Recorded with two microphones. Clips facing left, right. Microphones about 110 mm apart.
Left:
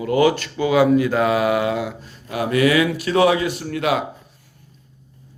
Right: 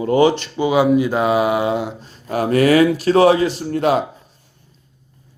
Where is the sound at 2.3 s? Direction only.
40° right (ahead or behind).